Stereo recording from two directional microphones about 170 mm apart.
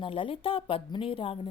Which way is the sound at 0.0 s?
30° left (ahead or behind).